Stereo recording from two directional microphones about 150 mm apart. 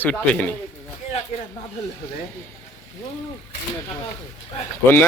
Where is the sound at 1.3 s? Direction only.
50° left (ahead or behind).